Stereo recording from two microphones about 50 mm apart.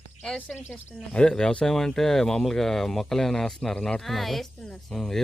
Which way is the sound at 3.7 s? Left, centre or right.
Centre.